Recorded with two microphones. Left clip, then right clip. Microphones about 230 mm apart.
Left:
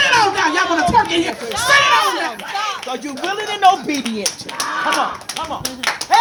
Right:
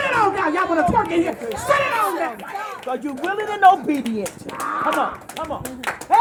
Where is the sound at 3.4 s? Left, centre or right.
Centre.